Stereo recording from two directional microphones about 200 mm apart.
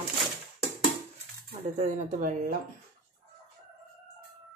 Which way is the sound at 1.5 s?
35° right (ahead or behind).